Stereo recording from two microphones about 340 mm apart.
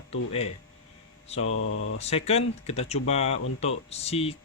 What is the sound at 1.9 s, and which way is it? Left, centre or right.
Speech, centre.